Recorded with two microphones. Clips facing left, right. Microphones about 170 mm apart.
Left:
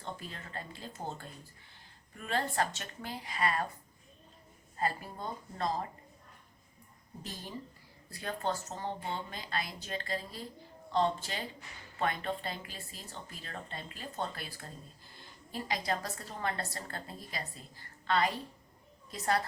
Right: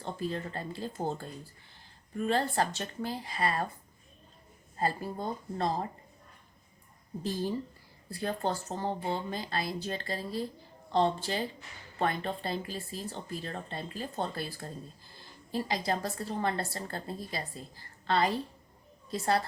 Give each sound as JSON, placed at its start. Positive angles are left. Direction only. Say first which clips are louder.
{"t": 0.0, "sound": "speech", "louder": "right 9 dB", "side_deg": -35}
{"t": 4.8, "sound": "speech", "louder": "right 3 dB", "side_deg": -30}
{"t": 8.1, "sound": "a woman's voice", "louder": "right 3 dB", "side_deg": -30}